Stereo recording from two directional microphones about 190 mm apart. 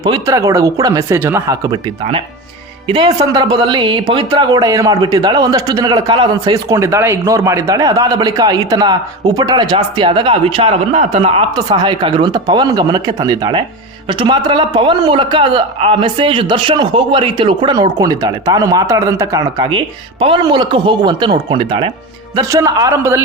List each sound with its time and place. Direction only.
0.0 s speech: 20° right (ahead or behind)
2.8 s speech: 25° right (ahead or behind)